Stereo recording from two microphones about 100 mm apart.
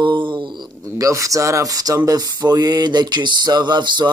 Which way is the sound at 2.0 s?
40° right (ahead or behind).